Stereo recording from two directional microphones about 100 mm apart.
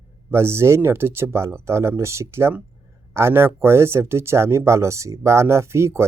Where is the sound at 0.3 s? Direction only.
25° right (ahead or behind).